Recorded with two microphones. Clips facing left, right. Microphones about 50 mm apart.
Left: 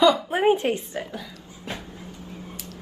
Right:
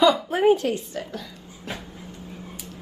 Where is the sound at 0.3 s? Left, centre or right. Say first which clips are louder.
Right 1 dB; left.